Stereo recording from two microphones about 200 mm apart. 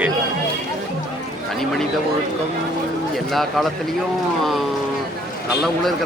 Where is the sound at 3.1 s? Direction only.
Centre (ahead or behind).